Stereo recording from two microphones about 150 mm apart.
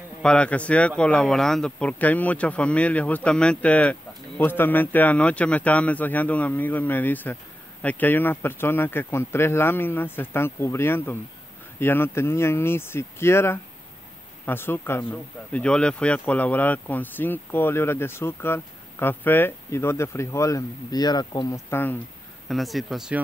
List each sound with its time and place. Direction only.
0.2 s speech: 5° left (ahead or behind)
22.5 s speech: centre (ahead or behind)